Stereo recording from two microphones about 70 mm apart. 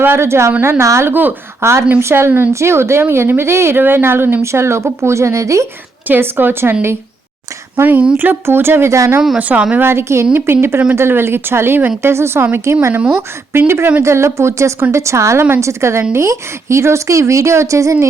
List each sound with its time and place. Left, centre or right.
0.0 s speech: right
1.1 s speech: right
1.6 s speech: right
6.1 s speech: right
7.8 s speech: right
9.4 s speech: right
9.7 s speech: right